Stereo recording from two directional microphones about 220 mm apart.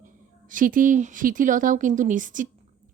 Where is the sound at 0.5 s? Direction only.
40° right (ahead or behind).